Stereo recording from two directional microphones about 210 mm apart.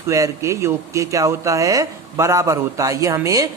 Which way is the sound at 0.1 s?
15° right (ahead or behind).